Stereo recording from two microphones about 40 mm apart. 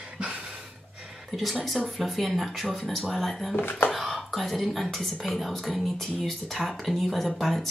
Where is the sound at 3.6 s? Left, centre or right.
Left.